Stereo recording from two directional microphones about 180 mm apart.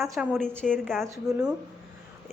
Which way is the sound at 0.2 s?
5° right (ahead or behind).